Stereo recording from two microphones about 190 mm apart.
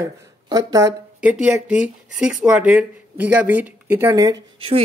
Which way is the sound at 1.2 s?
5° right (ahead or behind).